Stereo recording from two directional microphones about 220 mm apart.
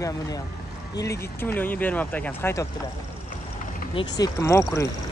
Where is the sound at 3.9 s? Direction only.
15° left (ahead or behind).